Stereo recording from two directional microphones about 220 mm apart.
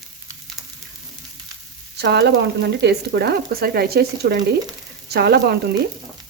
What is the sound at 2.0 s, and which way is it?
Speech, 50° right (ahead or behind).